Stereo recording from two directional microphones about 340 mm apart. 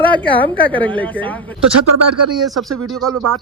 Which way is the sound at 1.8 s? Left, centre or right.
Right.